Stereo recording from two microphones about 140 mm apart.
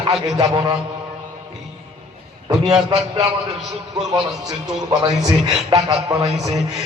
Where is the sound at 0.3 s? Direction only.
30° right (ahead or behind).